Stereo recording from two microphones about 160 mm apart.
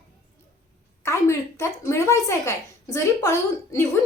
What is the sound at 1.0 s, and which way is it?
A woman's voice, 15° left (ahead or behind).